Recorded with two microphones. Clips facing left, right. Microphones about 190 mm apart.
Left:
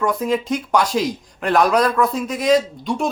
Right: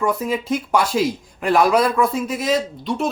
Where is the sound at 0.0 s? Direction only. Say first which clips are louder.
Left 1 dB; 5° right (ahead or behind).